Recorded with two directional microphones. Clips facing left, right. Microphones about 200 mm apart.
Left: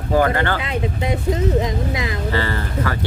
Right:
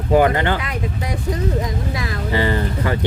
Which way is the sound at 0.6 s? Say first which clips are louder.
Left 3 dB; 25° left (ahead or behind).